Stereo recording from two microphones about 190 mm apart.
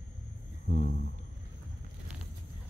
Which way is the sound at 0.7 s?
40° left (ahead or behind).